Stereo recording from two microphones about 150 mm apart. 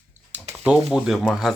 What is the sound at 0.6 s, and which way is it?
Speech, 5° right (ahead or behind).